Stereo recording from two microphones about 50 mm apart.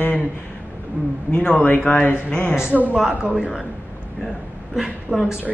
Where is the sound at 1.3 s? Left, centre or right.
Centre.